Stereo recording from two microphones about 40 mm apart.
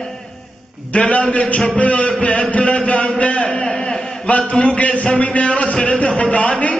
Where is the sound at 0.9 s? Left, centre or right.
Left.